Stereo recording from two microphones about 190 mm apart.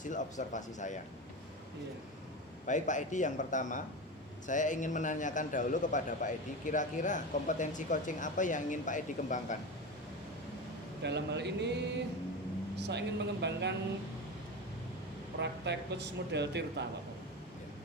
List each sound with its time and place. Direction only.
0.0 s a man's voice: 40° left (ahead or behind)
2.6 s a man's voice: 40° left (ahead or behind)
11.0 s speech: 65° right (ahead or behind)
15.4 s speech: 65° right (ahead or behind)